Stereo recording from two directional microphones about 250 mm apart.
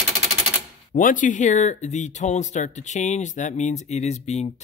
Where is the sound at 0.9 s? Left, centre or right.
Left.